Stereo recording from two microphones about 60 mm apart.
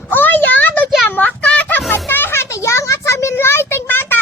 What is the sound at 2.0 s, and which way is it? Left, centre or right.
Children playing, left.